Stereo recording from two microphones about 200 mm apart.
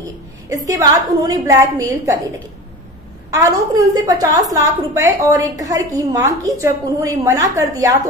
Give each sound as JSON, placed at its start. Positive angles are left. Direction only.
{"t": 0.5, "sound": "a woman's voice", "side_deg": -15}
{"t": 3.3, "sound": "a woman's voice", "side_deg": -15}